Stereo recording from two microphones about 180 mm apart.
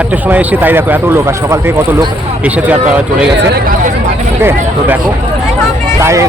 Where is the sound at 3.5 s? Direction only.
55° right (ahead or behind).